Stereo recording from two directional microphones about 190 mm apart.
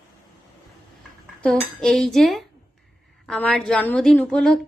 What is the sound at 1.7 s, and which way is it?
A woman's voice, centre (ahead or behind).